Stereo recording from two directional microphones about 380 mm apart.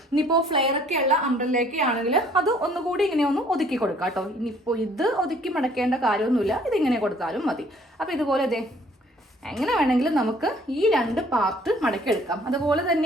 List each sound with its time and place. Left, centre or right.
0.3 s a woman's voice: centre
1.9 s a woman's voice: centre